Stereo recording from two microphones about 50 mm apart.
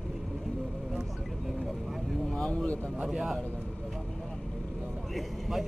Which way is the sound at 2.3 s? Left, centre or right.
Left.